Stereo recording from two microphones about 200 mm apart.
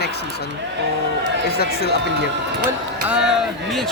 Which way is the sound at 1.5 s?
50° left (ahead or behind).